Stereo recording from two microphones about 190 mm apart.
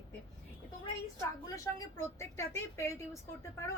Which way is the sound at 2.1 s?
15° left (ahead or behind).